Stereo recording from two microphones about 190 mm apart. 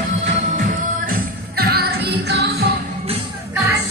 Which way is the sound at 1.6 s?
55° right (ahead or behind).